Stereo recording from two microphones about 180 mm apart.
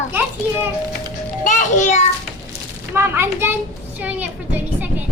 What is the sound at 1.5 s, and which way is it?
Music, 45° left (ahead or behind).